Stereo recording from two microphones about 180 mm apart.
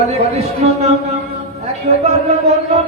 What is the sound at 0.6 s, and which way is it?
Music, 35° right (ahead or behind).